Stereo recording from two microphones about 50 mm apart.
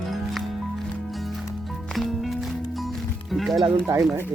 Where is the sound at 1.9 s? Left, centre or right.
Centre.